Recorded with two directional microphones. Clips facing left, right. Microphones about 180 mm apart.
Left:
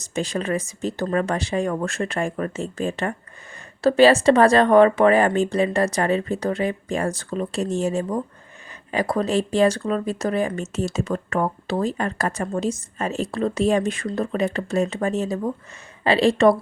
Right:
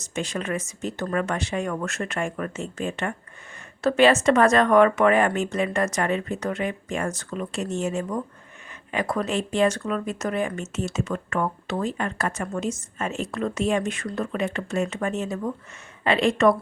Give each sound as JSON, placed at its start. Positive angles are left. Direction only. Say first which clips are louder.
{"t": 0.0, "sound": "speech", "louder": "left 4 dB", "side_deg": 35}